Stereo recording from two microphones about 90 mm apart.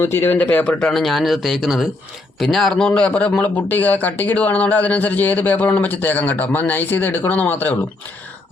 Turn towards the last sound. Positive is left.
turn(degrees=20)  # may be behind; listen again after turning